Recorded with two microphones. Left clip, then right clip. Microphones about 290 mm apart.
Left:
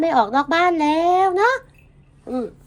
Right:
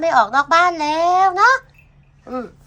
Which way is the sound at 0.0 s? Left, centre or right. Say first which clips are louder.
Right 3 dB; centre.